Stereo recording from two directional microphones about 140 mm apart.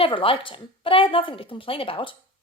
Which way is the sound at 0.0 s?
40° left (ahead or behind).